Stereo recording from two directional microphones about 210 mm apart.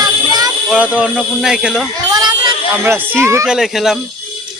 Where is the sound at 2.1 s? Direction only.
20° right (ahead or behind).